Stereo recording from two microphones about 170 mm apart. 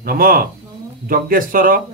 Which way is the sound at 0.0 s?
60° right (ahead or behind).